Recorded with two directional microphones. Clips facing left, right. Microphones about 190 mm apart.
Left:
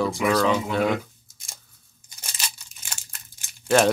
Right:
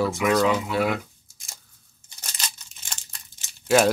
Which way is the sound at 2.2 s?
10° left (ahead or behind).